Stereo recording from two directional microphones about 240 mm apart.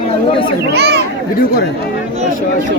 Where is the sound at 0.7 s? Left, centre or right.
Right.